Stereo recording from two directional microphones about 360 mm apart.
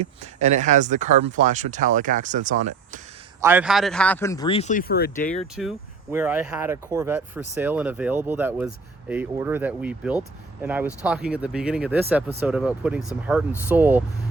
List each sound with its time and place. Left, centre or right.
0.0 s speech: centre
3.4 s speech: centre; by 5.5 s left
5.5 s speech: centre